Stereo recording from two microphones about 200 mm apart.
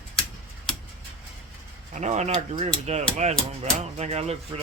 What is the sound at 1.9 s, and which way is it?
Speech, 35° right (ahead or behind).